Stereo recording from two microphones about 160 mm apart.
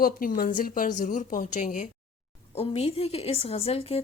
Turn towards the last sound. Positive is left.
turn(degrees=40)  # may be behind; listen again after turning